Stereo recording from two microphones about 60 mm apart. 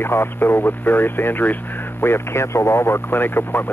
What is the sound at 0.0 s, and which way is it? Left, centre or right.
Speech, left.